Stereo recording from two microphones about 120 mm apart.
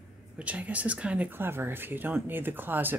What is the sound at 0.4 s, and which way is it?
Speech, 10° right (ahead or behind).